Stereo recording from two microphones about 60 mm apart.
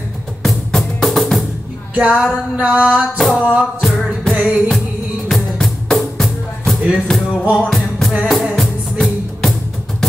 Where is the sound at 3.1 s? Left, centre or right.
Centre.